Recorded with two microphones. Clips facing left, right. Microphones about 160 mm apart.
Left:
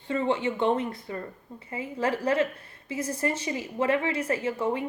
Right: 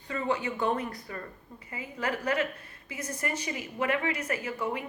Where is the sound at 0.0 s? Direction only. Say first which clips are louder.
Left 4 dB; 25° left (ahead or behind).